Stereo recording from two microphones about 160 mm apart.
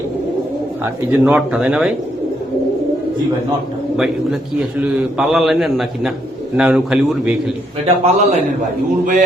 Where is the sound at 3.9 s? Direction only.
5° right (ahead or behind).